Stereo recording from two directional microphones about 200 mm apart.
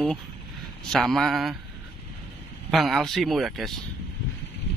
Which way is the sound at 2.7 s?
Centre (ahead or behind).